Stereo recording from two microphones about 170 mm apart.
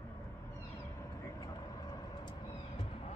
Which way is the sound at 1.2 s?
20° left (ahead or behind).